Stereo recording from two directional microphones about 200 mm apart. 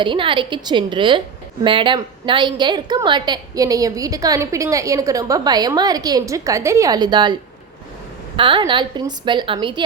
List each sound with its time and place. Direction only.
0.0 s a woman's voice: 25° right (ahead or behind)
8.4 s a woman's voice: 25° right (ahead or behind)